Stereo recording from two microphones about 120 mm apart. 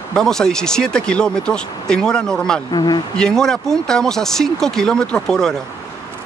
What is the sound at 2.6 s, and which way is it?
Speech, 35° left (ahead or behind).